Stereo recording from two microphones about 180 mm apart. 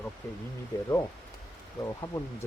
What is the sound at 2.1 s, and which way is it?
Speech, 15° left (ahead or behind).